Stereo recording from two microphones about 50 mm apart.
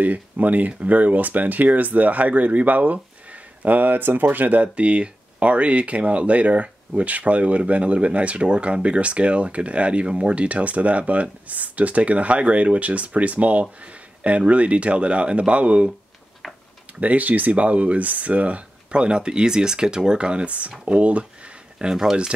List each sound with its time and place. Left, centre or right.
0.0 s speech: right
17.0 s speech: right
21.7 s speech: centre